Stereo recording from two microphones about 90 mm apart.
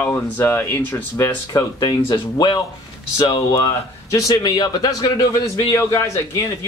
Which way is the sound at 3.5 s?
40° left (ahead or behind).